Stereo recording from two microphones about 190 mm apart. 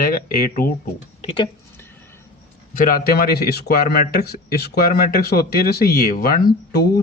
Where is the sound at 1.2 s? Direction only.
30° left (ahead or behind).